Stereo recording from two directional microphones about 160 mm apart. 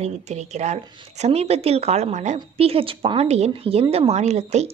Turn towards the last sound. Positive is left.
turn(degrees=-45)  # may be behind; listen again after turning